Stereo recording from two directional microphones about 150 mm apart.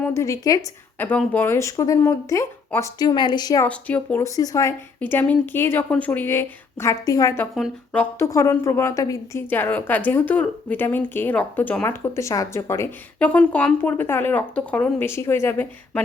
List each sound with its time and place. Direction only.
0.0 s speech: 20° left (ahead or behind)
3.7 s a woman's voice: 10° left (ahead or behind)
4.4 s speech: 20° left (ahead or behind)
4.9 s a woman's voice: 10° left (ahead or behind)
7.5 s speech: centre (ahead or behind)
8.2 s a woman's voice: 20° left (ahead or behind)